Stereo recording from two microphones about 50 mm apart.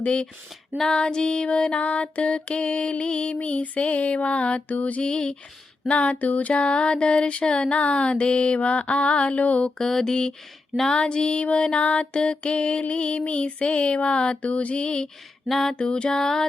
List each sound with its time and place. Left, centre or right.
0.0 s female singing: centre
5.0 s music: centre
5.9 s female singing: left
6.5 s female singing: left
9.7 s music: centre
10.9 s female singing: centre
15.4 s music: centre
15.7 s music: left